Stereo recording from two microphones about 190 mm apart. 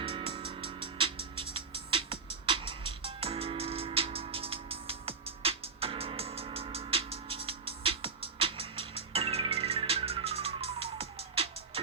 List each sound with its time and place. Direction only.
0.0 s music: 30° right (ahead or behind)